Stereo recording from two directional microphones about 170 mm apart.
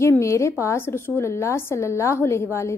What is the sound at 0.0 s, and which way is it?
A woman's voice, 15° left (ahead or behind).